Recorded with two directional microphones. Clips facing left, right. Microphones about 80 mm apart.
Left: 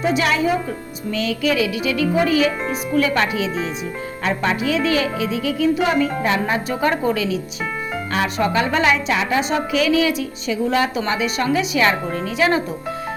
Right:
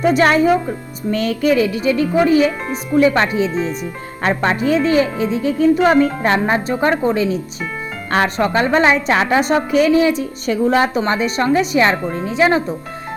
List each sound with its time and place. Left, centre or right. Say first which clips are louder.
0.0 s a woman's voice: right 5 dB; right
1.5 s speech: right 4 dB; right
6.4 s speech: right 3 dB; right
8.4 s speech: right 2 dB; right
9.8 s speech: right 4 dB; right
12.1 s speech: right 3 dB; right